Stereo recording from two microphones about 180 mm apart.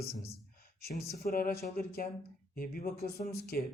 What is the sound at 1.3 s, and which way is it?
Speech, 60° left (ahead or behind).